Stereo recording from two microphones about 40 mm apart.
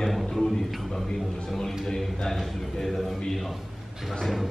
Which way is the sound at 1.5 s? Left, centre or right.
Centre.